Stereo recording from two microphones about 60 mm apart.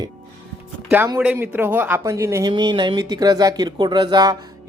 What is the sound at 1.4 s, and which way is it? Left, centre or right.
Speech, right.